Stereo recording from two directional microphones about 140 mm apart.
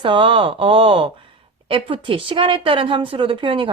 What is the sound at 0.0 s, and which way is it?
A woman's voice, 35° right (ahead or behind).